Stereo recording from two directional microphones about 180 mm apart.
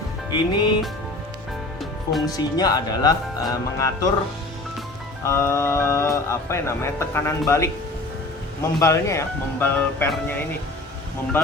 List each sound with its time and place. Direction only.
0.3 s speech: 25° left (ahead or behind)
2.2 s speech: 20° left (ahead or behind)
5.2 s speech: 15° left (ahead or behind)